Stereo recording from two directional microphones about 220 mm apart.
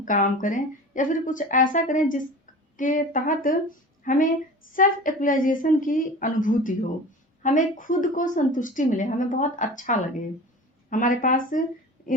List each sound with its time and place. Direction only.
0.0 s a woman's voice: 35° left (ahead or behind)